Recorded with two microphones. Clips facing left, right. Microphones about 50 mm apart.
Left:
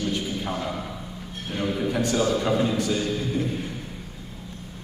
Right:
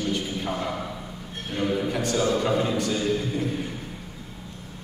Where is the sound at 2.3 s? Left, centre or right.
Centre.